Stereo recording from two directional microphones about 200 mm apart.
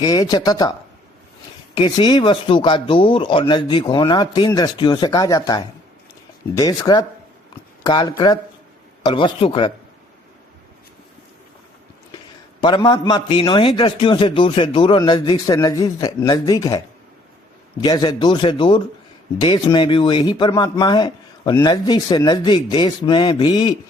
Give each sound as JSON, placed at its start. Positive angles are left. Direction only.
{"t": 0.0, "sound": "speech", "side_deg": 20}
{"t": 1.7, "sound": "speech", "side_deg": 20}
{"t": 12.6, "sound": "speech", "side_deg": 20}